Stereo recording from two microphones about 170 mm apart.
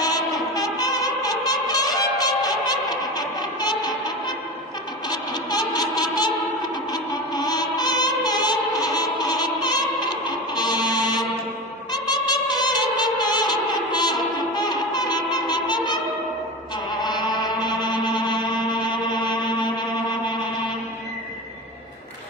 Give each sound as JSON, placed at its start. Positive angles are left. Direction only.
{"t": 0.0, "sound": "music", "side_deg": 20}
{"t": 5.1, "sound": "music", "side_deg": 25}